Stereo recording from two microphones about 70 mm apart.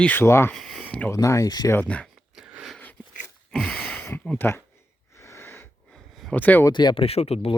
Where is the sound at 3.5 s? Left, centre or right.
Centre.